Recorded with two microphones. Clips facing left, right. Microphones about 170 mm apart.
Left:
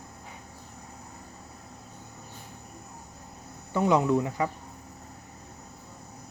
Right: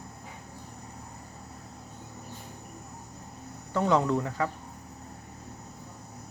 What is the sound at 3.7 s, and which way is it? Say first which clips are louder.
Speech: left 2 dB; 15° left (ahead or behind).